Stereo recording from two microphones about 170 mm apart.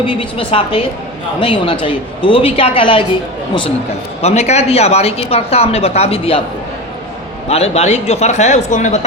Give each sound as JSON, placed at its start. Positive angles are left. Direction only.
{"t": 0.0, "sound": "speech", "side_deg": 30}
{"t": 4.2, "sound": "speech", "side_deg": 40}
{"t": 7.4, "sound": "speech", "side_deg": 35}